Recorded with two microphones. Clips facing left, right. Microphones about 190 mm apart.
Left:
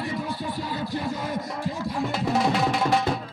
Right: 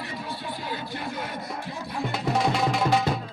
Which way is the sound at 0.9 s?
60° right (ahead or behind).